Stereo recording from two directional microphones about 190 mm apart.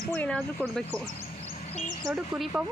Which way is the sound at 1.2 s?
30° left (ahead or behind).